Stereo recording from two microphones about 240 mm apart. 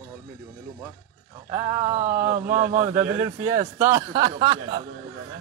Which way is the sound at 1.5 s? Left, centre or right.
Centre.